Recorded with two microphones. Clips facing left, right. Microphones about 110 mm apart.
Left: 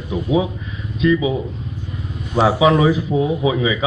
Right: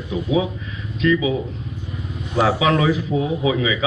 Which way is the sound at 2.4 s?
25° left (ahead or behind).